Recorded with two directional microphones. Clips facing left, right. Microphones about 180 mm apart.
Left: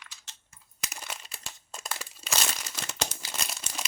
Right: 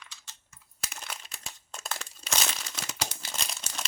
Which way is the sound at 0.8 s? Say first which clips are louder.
Left 1 dB; 5° left (ahead or behind).